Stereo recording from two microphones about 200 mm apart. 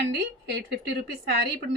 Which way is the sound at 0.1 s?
60° right (ahead or behind).